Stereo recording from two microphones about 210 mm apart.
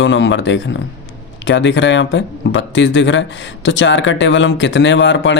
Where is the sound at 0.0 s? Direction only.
60° left (ahead or behind).